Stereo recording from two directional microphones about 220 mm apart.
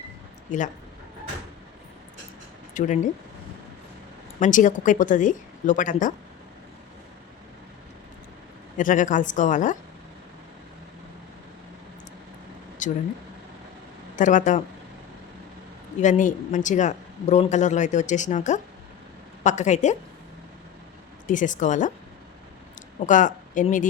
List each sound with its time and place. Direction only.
0.5 s speech: 35° left (ahead or behind)
2.7 s speech: 35° left (ahead or behind)
4.4 s speech: 35° left (ahead or behind)
8.8 s speech: 35° left (ahead or behind)
12.8 s speech: 35° left (ahead or behind)
14.2 s speech: 35° left (ahead or behind)
16.0 s speech: 35° left (ahead or behind)
21.2 s speech: 35° left (ahead or behind)
23.0 s speech: 35° left (ahead or behind)